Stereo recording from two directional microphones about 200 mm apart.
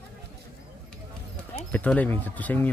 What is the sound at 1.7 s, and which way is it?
Speech, 5° left (ahead or behind).